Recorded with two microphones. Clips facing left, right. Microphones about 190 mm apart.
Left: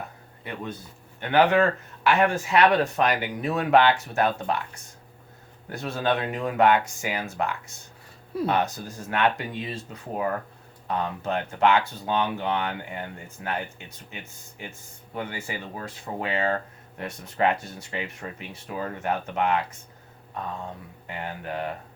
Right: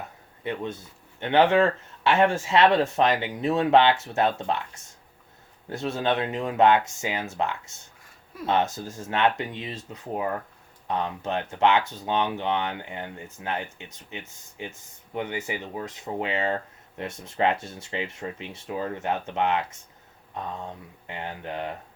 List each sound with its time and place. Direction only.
0.4 s speech: 25° right (ahead or behind)
21.1 s speech: 20° right (ahead or behind)